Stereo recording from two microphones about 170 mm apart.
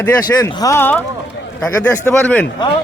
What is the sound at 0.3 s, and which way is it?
A man's voice, 20° left (ahead or behind).